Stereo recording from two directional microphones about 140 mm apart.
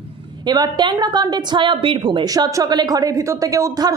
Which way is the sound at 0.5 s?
30° right (ahead or behind).